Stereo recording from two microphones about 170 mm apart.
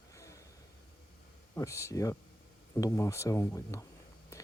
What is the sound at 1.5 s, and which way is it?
Speech, 15° left (ahead or behind).